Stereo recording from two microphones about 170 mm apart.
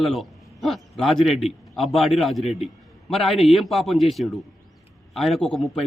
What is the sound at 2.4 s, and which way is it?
Speech, 40° left (ahead or behind).